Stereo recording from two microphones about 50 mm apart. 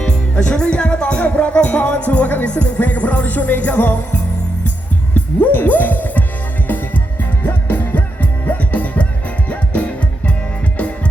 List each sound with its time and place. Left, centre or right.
0.0 s music: centre
5.1 s music: left